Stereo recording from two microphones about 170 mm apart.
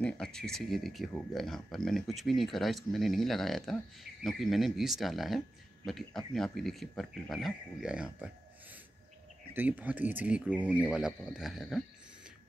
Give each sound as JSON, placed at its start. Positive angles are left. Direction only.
{"t": 0.0, "sound": "speech", "side_deg": 5}
{"t": 9.5, "sound": "speech", "side_deg": -10}